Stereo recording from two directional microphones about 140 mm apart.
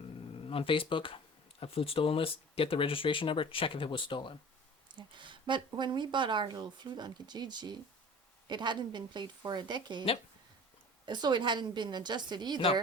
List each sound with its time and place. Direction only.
0.4 s speech: 40° left (ahead or behind)
4.9 s speech: 35° right (ahead or behind)
11.0 s speech: 30° right (ahead or behind)